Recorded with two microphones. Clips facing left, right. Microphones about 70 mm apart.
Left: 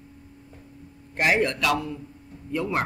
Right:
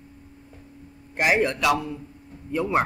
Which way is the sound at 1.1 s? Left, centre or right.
Centre.